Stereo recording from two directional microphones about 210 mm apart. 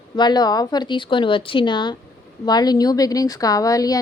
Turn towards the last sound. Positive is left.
turn(degrees=15)  # may be behind; listen again after turning